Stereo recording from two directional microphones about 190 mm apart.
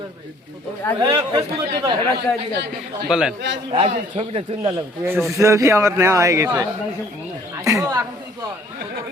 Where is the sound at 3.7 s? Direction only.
30° right (ahead or behind).